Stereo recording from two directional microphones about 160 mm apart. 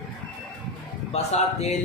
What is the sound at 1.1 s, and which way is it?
Speech, 40° left (ahead or behind).